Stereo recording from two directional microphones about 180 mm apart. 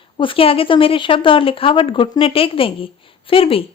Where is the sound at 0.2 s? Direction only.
30° left (ahead or behind).